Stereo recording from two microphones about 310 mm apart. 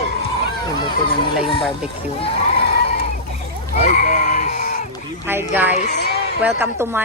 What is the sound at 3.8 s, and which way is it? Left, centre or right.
Goat, left.